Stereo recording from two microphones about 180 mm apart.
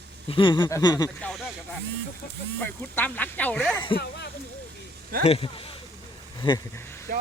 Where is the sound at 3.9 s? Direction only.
65° left (ahead or behind).